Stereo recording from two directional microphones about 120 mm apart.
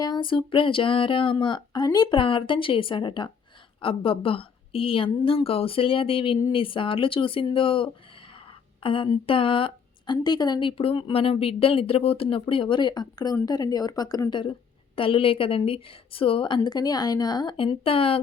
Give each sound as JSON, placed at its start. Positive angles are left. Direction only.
{"t": 0.0, "sound": "a woman's voice", "side_deg": 40}
{"t": 16.6, "sound": "speech", "side_deg": 35}